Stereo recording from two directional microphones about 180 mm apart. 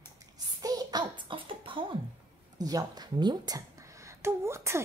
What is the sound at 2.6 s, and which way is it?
Speech, 20° right (ahead or behind).